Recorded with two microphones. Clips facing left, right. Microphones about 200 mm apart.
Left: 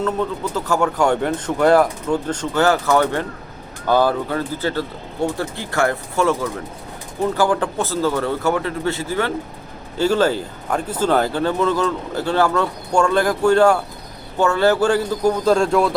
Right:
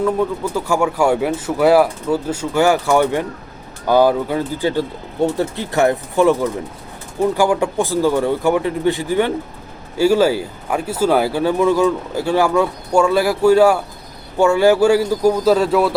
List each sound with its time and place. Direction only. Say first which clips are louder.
0.0 s speech: right 4 dB; 10° right (ahead or behind)